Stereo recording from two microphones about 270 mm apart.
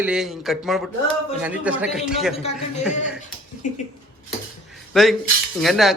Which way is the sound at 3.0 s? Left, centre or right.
Left.